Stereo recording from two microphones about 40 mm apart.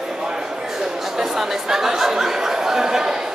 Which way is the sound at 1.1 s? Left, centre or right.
Centre.